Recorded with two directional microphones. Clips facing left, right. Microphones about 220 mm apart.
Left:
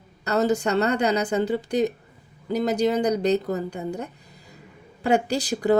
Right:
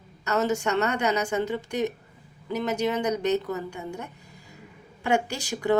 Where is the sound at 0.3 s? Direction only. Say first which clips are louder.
Left 3 dB; 35° left (ahead or behind).